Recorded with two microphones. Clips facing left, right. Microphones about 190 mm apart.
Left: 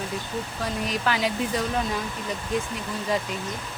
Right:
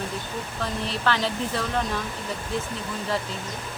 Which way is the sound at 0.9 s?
10° left (ahead or behind).